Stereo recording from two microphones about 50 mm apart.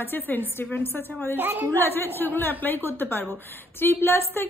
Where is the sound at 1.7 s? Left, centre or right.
Left.